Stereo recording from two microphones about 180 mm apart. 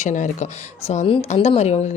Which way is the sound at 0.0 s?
40° left (ahead or behind).